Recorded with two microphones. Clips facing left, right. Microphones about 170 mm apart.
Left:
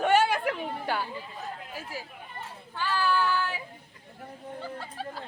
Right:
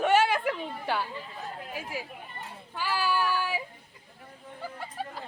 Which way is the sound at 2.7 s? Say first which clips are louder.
Left 1 dB; 10° right (ahead or behind).